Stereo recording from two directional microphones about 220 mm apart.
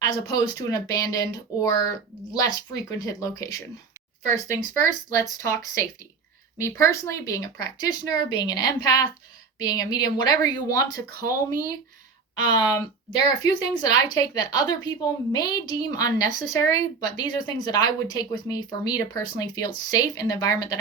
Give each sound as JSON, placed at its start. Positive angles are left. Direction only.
{"t": 0.0, "sound": "a woman's voice", "side_deg": 15}